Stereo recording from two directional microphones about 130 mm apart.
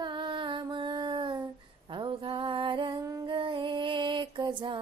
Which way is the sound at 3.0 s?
25° right (ahead or behind).